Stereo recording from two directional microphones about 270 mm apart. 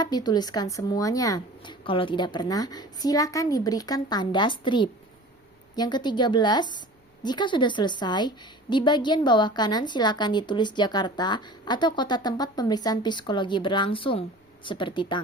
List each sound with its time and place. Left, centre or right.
0.0 s a woman's voice: centre